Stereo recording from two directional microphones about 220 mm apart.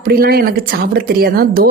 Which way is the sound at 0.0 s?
45° right (ahead or behind).